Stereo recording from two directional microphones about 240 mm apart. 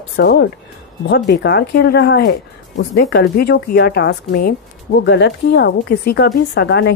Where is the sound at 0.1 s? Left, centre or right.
Left.